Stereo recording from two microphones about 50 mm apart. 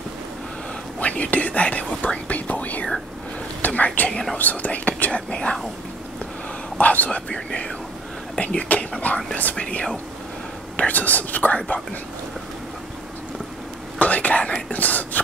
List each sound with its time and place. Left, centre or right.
0.9 s whispering: left
4.1 s speech: centre
4.4 s speech: left
6.8 s speech: left
8.4 s whispering: left
9.0 s speech: left
13.9 s speech: left